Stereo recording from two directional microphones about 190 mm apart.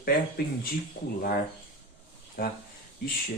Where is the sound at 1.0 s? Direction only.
65° left (ahead or behind).